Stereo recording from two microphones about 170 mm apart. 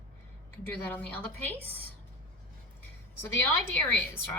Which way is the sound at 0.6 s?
10° left (ahead or behind).